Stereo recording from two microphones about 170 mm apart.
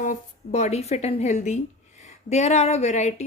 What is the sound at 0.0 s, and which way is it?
A woman's voice, 45° left (ahead or behind).